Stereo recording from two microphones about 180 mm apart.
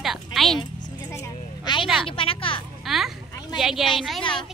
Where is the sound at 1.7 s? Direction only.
25° left (ahead or behind).